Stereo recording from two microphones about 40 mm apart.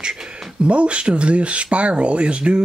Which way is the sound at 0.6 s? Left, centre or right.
Right.